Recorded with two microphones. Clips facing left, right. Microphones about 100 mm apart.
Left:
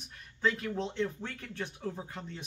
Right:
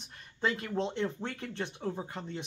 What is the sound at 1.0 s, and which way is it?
Speech, 25° right (ahead or behind).